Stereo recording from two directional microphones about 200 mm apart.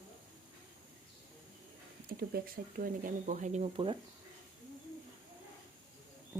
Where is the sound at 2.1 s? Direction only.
50° right (ahead or behind); by 3.9 s 30° right (ahead or behind).